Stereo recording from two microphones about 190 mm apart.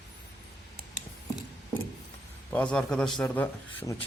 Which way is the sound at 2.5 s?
5° left (ahead or behind).